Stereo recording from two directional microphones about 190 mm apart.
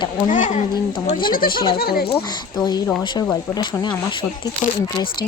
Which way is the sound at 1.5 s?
25° left (ahead or behind).